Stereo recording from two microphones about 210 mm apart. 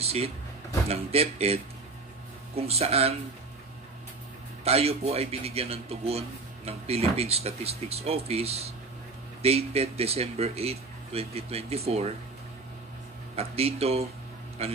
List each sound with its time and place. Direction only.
0.0 s speech: 30° right (ahead or behind)
4.6 s speech: 30° right (ahead or behind)
13.4 s speech: 30° right (ahead or behind)